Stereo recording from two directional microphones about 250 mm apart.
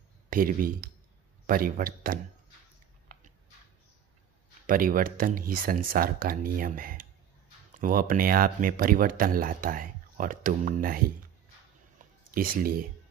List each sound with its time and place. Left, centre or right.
0.3 s speech: right
4.6 s speech: right
12.4 s speech: right